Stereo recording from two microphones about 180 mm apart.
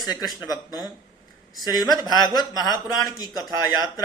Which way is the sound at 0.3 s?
20° left (ahead or behind).